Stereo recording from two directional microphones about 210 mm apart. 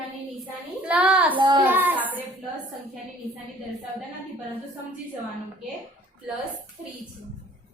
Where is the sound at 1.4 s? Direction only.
20° right (ahead or behind).